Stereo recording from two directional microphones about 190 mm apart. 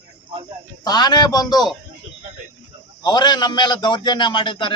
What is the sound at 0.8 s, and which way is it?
Speech, 20° left (ahead or behind).